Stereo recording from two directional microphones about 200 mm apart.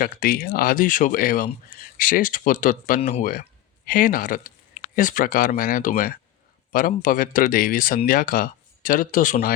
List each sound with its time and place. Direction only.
0.0 s speech: 45° left (ahead or behind)